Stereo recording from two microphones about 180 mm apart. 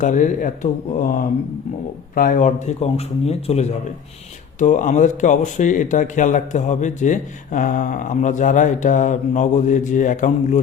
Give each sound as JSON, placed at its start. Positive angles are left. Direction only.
{"t": 0.0, "sound": "speech", "side_deg": 45}